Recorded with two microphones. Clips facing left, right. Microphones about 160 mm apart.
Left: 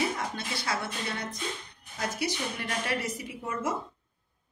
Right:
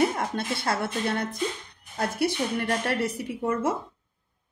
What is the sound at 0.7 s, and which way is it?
A woman's voice, 55° right (ahead or behind).